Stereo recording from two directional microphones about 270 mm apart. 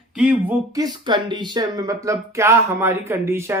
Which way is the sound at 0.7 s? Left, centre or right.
Centre.